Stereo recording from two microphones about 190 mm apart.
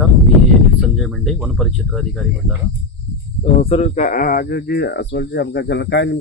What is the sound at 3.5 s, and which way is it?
Speech, 35° left (ahead or behind).